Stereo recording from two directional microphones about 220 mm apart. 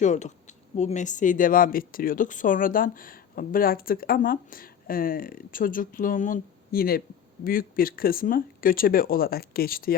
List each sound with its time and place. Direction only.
0.0 s speech: 30° left (ahead or behind)